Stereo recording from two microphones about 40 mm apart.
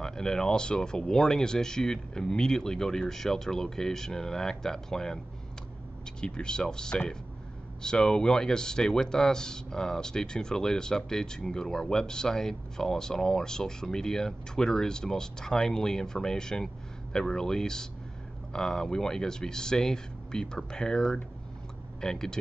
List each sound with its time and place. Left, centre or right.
0.0 s speech: centre
6.2 s speech: left